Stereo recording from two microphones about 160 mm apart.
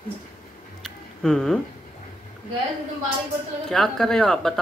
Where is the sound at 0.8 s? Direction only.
5° left (ahead or behind).